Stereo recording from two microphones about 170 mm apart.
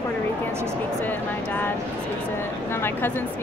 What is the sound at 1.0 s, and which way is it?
Speech, 10° left (ahead or behind).